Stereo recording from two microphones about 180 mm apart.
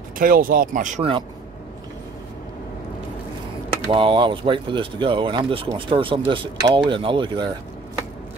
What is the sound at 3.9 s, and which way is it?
Speech, 30° right (ahead or behind).